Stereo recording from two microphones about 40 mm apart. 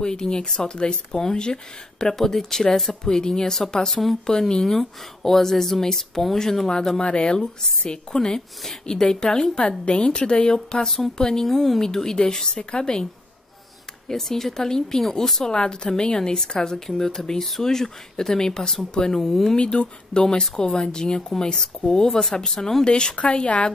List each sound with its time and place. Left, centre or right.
0.0 s a woman's voice: centre
11.4 s speech: centre
11.8 s a woman's voice: centre
14.0 s a woman's voice: centre
19.2 s a woman's voice: centre
19.5 s a woman's voice: left
22.8 s a woman's voice: left